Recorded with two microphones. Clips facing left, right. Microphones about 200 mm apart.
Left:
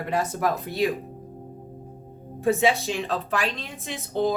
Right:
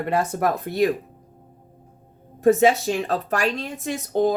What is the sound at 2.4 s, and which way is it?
A woman's voice, 45° right (ahead or behind).